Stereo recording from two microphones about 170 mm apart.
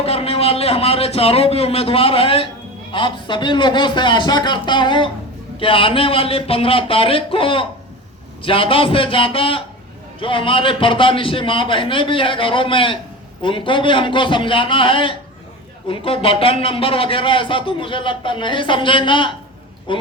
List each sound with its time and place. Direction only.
0.0 s a man's voice: 35° left (ahead or behind)